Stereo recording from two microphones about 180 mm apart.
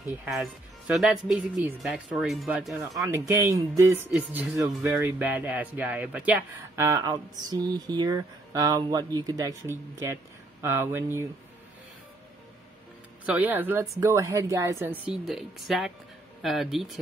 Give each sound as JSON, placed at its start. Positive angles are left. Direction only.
{"t": 0.2, "sound": "speech", "side_deg": -5}
{"t": 2.9, "sound": "speech", "side_deg": -15}
{"t": 13.2, "sound": "speech", "side_deg": -10}
{"t": 15.0, "sound": "speech", "side_deg": 0}